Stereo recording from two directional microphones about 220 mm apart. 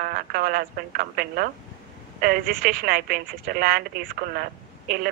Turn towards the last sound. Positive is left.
turn(degrees=-40)  # may be behind; listen again after turning